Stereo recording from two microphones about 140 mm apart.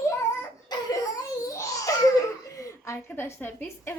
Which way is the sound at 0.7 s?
30° left (ahead or behind).